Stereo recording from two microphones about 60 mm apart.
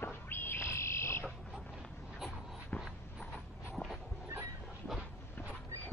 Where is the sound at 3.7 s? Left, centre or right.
Centre.